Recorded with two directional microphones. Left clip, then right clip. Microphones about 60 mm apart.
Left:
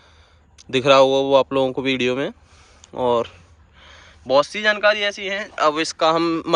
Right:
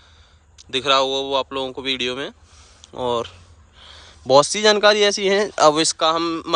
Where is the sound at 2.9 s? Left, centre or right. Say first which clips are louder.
Left 3 dB; right.